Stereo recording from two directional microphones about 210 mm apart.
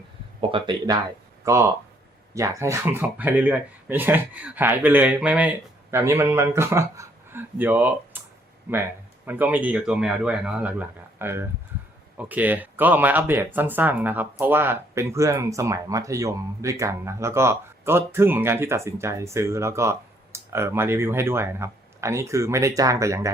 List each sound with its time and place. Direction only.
0.5 s speech: 20° right (ahead or behind)
9.2 s speech: 10° right (ahead or behind)